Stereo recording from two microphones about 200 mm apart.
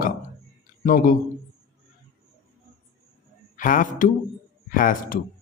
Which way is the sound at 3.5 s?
40° left (ahead or behind).